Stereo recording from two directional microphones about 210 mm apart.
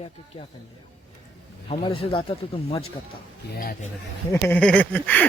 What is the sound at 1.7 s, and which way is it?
Speech, 25° left (ahead or behind).